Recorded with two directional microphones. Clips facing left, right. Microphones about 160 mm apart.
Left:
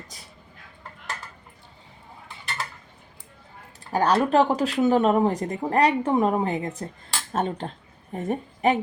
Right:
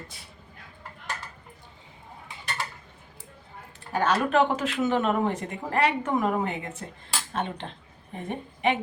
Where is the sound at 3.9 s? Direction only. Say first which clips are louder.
Left 4 dB; 35° left (ahead or behind).